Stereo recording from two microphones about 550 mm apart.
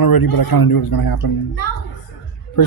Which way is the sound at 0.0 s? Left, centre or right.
Left.